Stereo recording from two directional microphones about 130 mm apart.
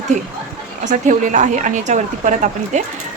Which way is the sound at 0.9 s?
70° right (ahead or behind).